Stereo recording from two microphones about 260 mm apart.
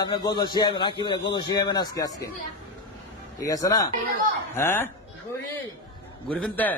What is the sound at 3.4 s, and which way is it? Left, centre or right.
A man's voice, centre.